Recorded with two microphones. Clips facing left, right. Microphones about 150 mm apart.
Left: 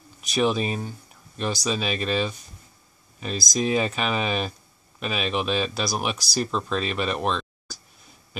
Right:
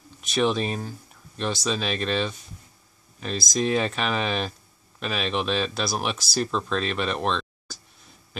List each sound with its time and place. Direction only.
0.2 s speech: centre (ahead or behind)